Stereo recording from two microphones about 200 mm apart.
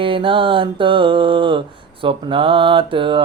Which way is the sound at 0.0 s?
25° right (ahead or behind).